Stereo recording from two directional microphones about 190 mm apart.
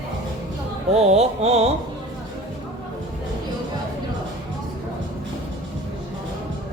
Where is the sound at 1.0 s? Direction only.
35° right (ahead or behind).